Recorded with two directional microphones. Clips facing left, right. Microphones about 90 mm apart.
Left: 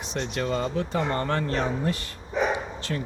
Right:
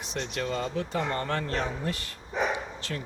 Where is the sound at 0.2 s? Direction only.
35° left (ahead or behind).